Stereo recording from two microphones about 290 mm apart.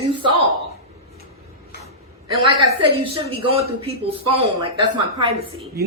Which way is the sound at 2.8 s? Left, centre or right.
Centre.